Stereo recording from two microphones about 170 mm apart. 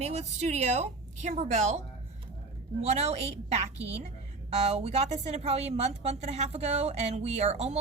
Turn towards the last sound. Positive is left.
turn(degrees=-40)  # may be behind; listen again after turning